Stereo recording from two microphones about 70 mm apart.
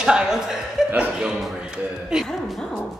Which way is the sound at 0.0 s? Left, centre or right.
Centre.